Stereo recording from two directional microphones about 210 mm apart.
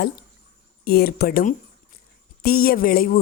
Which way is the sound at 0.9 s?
45° left (ahead or behind).